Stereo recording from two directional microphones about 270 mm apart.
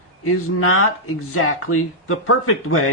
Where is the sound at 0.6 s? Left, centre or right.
Left.